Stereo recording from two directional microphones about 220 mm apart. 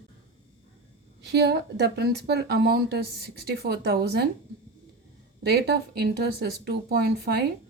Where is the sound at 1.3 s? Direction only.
50° right (ahead or behind).